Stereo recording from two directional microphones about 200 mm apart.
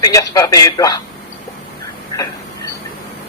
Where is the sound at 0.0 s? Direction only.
15° left (ahead or behind).